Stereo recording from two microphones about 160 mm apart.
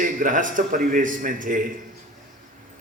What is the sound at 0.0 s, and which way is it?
A man's voice, 55° right (ahead or behind).